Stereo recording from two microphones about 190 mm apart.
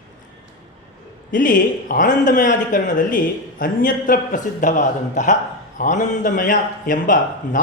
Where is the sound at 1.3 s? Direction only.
45° left (ahead or behind).